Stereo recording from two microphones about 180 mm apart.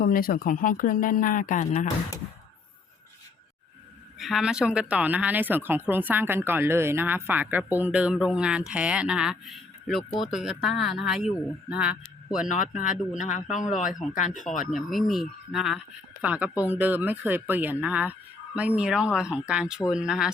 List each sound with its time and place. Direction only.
0.0 s speech: 55° left (ahead or behind)
4.2 s speech: centre (ahead or behind)
12.5 s speech: 45° left (ahead or behind)
13.9 s speech: centre (ahead or behind)
14.2 s speech: 45° left (ahead or behind)
14.7 s speech: centre (ahead or behind)